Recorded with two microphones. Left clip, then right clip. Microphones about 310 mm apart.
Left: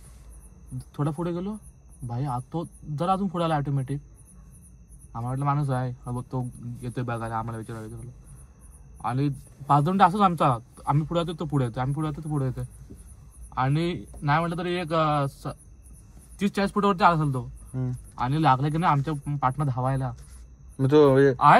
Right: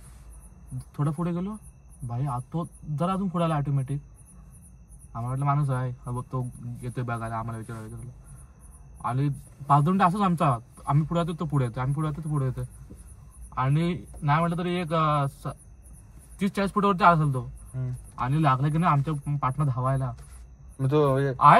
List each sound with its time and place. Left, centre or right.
1.0 s a man's voice: centre
5.2 s a man's voice: centre
9.0 s a man's voice: centre
16.7 s a man's voice: centre
20.8 s a man's voice: left